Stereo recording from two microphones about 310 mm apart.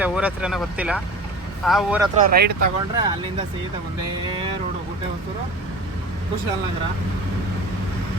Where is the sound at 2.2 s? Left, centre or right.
Right.